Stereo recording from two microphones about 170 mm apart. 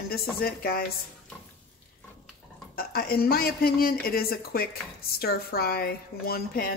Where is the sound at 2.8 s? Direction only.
65° left (ahead or behind).